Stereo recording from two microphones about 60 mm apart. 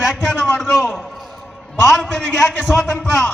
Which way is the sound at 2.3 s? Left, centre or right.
Centre.